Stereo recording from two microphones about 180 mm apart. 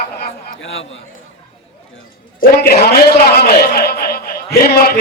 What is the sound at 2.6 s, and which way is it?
A man's voice, 60° left (ahead or behind).